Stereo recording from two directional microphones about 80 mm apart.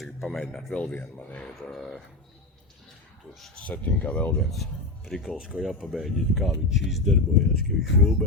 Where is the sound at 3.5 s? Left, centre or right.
Centre.